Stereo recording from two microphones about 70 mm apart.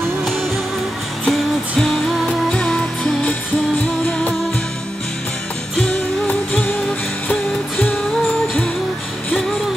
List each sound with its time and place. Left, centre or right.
1.2 s music: centre
5.8 s music: centre